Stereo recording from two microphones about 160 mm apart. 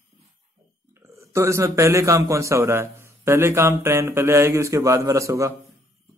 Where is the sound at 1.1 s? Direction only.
20° right (ahead or behind).